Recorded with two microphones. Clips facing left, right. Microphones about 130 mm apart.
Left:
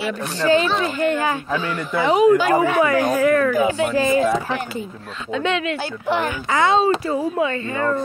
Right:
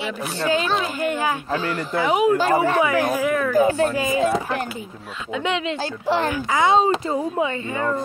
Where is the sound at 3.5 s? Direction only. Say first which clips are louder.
Right 1 dB; 40° right (ahead or behind).